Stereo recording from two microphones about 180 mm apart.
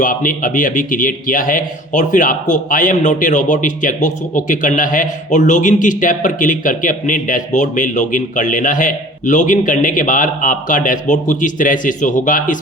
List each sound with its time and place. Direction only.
0.0 s a man's voice: 50° left (ahead or behind)